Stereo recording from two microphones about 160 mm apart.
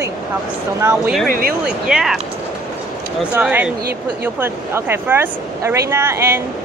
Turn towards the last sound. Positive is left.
turn(degrees=-15)  # may be behind; listen again after turning